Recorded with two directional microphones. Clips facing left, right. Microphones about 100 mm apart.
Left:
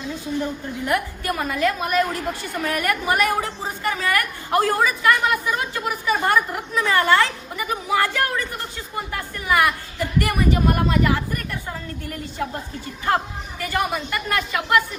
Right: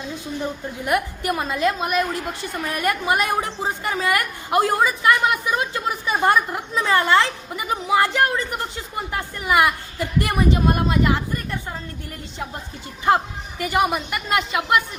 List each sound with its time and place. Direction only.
0.9 s a woman's voice: 20° right (ahead or behind)
13.6 s a woman's voice: 20° right (ahead or behind)